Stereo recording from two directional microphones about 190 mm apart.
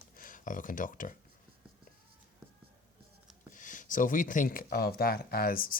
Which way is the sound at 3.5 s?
45° left (ahead or behind).